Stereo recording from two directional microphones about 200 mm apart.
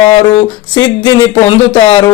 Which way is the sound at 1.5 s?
20° left (ahead or behind).